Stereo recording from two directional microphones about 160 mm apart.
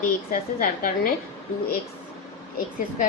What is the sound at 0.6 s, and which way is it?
Speech, 65° left (ahead or behind).